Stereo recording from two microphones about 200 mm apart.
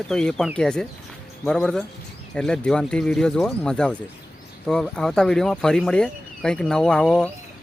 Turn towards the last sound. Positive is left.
turn(degrees=5)  # may be behind; listen again after turning